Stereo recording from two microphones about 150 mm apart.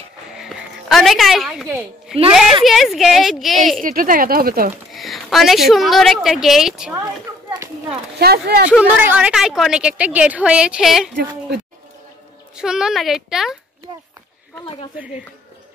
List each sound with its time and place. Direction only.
0.4 s a sound: centre (ahead or behind)
2.1 s a woman's voice: 5° right (ahead or behind)
3.8 s speech: 70° right (ahead or behind)
4.9 s a woman's voice: centre (ahead or behind)
8.2 s speech: 90° right
8.6 s a woman's voice: 10° right (ahead or behind)
12.5 s a woman's voice: 5° right (ahead or behind)